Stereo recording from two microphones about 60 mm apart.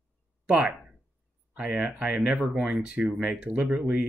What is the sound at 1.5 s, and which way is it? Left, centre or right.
Speech, right.